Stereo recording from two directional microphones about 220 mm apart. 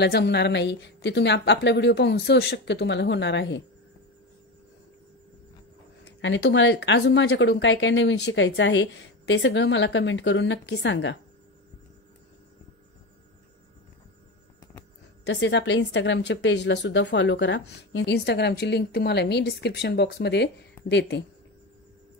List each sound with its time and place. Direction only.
0.0 s speech: 50° left (ahead or behind)
6.0 s speech: 55° left (ahead or behind)
15.2 s speech: 55° left (ahead or behind)